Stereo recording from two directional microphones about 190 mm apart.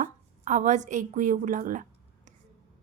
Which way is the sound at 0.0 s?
40° right (ahead or behind).